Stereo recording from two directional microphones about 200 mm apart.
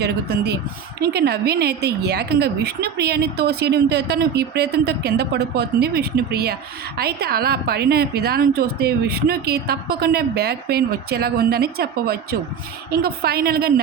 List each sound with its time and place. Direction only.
0.0 s a woman's voice: 55° right (ahead or behind)